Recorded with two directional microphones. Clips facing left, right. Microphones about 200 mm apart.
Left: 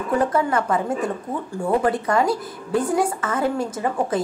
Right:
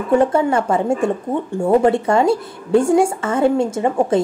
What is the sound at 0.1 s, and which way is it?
Speech, 25° right (ahead or behind).